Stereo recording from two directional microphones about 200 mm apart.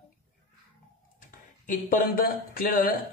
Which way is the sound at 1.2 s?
40° left (ahead or behind).